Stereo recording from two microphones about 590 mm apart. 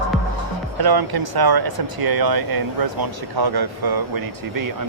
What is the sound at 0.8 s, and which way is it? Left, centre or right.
Speech, right.